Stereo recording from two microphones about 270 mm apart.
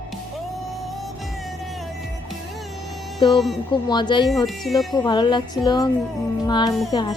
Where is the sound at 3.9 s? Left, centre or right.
Centre.